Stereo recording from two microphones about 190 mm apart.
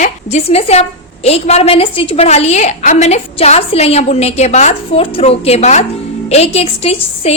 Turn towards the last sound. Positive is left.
turn(degrees=30)  # may be behind; listen again after turning